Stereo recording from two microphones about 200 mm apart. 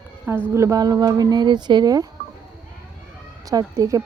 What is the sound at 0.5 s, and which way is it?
Speech, 15° right (ahead or behind).